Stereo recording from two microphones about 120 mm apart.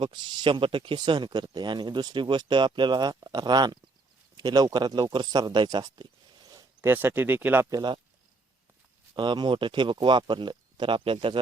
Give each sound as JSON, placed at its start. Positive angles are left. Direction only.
{"t": 0.0, "sound": "speech", "side_deg": -40}
{"t": 6.8, "sound": "speech", "side_deg": -15}
{"t": 7.7, "sound": "speech", "side_deg": -35}
{"t": 9.1, "sound": "speech", "side_deg": -40}